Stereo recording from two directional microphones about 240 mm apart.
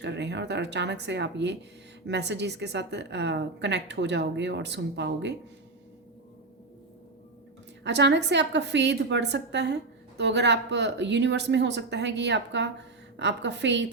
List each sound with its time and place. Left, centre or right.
0.0 s speech: right
7.9 s speech: right